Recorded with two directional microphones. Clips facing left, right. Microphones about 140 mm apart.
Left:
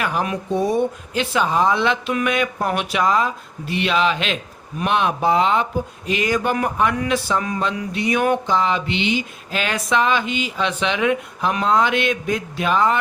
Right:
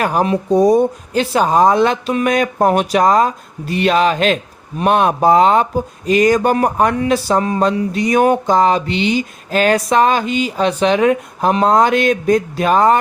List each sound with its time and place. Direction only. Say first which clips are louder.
0.0 s speech: right 7 dB; 40° right (ahead or behind)
7.0 s a sound: right 6 dB; 40° right (ahead or behind)
11.6 s speech: right 5 dB; 45° right (ahead or behind)